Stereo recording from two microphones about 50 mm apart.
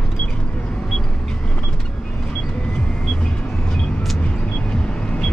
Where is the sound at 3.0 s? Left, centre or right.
Centre.